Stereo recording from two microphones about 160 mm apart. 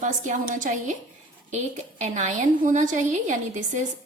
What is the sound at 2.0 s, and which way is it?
A woman's voice, 50° right (ahead or behind).